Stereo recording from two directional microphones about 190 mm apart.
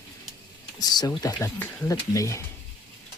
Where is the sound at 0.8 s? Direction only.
20° left (ahead or behind).